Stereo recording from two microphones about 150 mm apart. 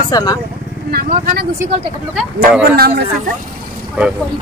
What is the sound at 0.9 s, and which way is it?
Speech, 80° right.